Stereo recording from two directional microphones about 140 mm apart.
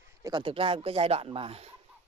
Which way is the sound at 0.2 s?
35° right (ahead or behind).